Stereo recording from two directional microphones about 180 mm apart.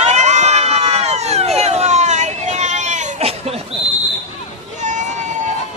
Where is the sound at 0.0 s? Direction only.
40° right (ahead or behind).